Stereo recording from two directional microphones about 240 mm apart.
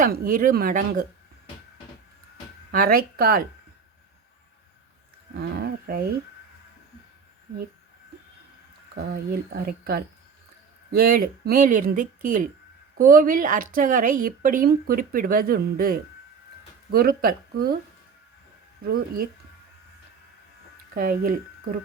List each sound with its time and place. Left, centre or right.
0.0 s speech: right
2.7 s speech: right
5.3 s speech: right
9.0 s speech: right
18.9 s speech: right
20.9 s speech: right